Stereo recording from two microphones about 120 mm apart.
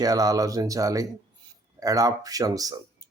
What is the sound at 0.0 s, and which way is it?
Speech, 30° right (ahead or behind).